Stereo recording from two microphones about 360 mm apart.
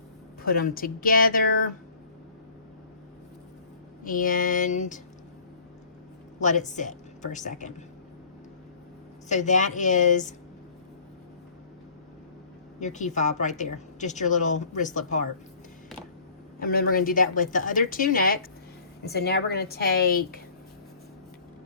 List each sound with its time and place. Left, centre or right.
0.4 s a woman's voice: left
4.0 s a woman's voice: left
6.4 s a woman's voice: centre
9.3 s a woman's voice: centre
12.8 s a woman's voice: centre
16.6 s a woman's voice: left